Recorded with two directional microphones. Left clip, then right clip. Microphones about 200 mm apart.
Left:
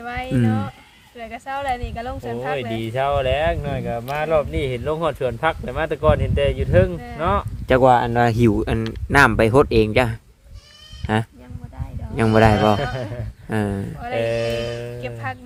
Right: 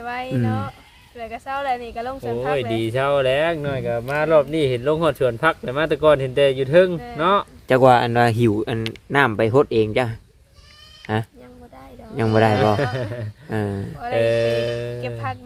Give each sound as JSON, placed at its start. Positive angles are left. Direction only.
{"t": 0.0, "sound": "a sound", "side_deg": 5}
{"t": 0.3, "sound": "speech", "side_deg": 5}
{"t": 2.7, "sound": "speech", "side_deg": -60}
{"t": 7.8, "sound": "speech", "side_deg": -10}
{"t": 8.3, "sound": "speech", "side_deg": 10}
{"t": 14.2, "sound": "music", "side_deg": -55}
{"t": 15.0, "sound": "speech", "side_deg": 5}